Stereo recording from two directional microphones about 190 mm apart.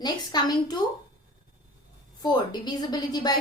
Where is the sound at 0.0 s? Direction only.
20° left (ahead or behind).